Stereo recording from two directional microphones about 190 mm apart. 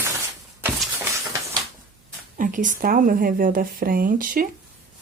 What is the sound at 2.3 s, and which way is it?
Speech, 45° right (ahead or behind).